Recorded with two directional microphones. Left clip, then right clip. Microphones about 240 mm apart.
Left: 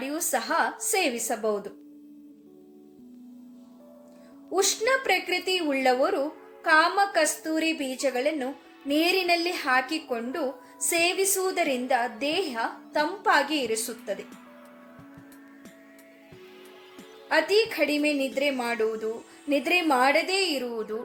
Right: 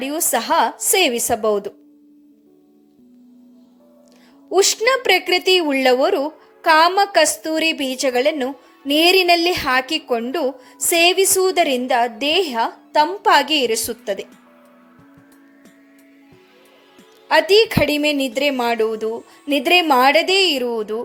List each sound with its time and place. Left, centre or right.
0.0 s a woman's voice: right
4.5 s a woman's voice: right
17.2 s a woman's voice: right